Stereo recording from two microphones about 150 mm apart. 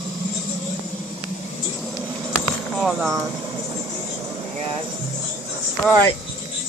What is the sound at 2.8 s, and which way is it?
Speech, centre (ahead or behind).